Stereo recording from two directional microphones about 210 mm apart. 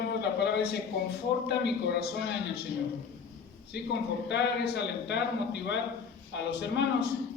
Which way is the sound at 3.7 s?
55° left (ahead or behind).